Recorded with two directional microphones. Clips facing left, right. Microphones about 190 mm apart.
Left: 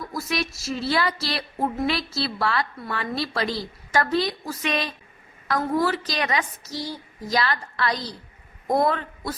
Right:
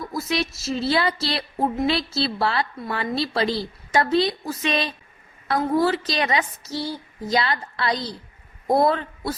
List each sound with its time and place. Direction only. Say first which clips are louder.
0.1 s a woman's voice: right 3 dB; 25° right (ahead or behind)